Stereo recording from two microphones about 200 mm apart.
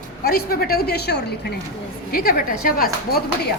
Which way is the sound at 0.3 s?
50° left (ahead or behind).